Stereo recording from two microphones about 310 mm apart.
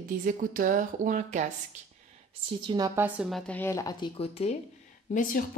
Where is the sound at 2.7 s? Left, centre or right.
Centre; by 5.4 s left.